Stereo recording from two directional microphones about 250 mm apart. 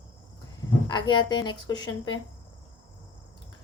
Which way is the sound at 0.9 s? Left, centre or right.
Centre.